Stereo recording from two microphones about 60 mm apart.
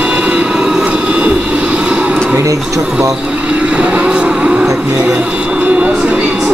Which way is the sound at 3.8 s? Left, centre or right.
Centre.